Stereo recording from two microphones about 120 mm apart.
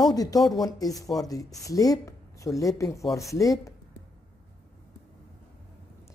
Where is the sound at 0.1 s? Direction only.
30° left (ahead or behind).